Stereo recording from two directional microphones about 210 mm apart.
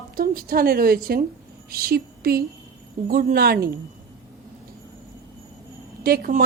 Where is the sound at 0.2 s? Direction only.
45° right (ahead or behind).